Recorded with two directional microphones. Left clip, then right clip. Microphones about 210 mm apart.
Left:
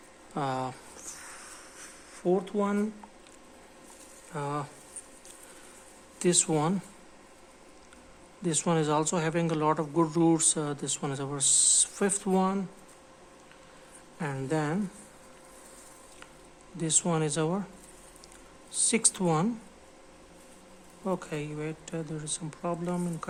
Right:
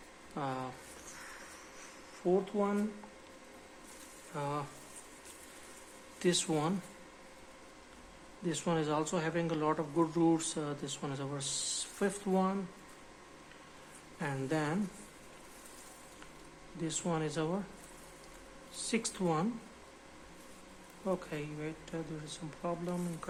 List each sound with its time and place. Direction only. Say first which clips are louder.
0.3 s speech: left 7 dB; 45° left (ahead or behind)
2.2 s speech: left 4 dB; 50° left (ahead or behind)
4.4 s speech: left 4 dB; 40° left (ahead or behind)
6.1 s speech: left 5 dB; 40° left (ahead or behind)
8.4 s speech: left 6 dB; 45° left (ahead or behind)
14.2 s speech: left 4 dB; 40° left (ahead or behind)
16.8 s speech: left 7 dB; 45° left (ahead or behind)
18.9 s speech: left 6 dB; 45° left (ahead or behind)
21.0 s speech: left 4 dB; 45° left (ahead or behind)